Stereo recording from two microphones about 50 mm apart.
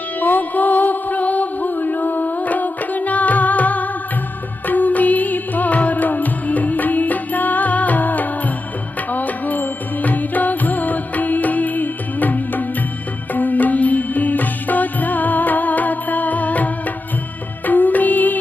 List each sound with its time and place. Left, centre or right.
0.2 s music: left